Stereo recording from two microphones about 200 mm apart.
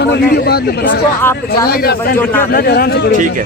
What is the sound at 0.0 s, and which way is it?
A man's voice, 55° left (ahead or behind).